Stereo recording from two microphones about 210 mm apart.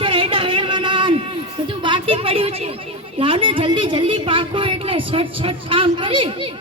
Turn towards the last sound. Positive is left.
turn(degrees=-25)  # may be behind; listen again after turning